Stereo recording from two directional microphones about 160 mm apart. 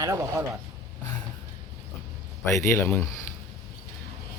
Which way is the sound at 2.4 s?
15° left (ahead or behind).